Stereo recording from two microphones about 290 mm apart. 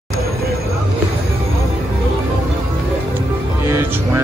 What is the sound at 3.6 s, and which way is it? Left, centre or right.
Music, centre.